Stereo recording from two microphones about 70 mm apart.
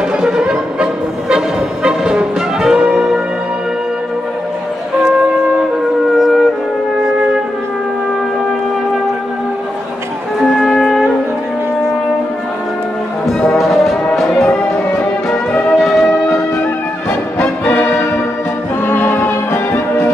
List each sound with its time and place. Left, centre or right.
0.2 s music: centre
6.1 s wind instrument: centre
10.5 s music: centre
13.3 s music: centre
15.7 s music: centre
18.9 s music: left